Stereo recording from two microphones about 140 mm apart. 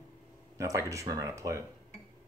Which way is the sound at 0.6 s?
20° right (ahead or behind).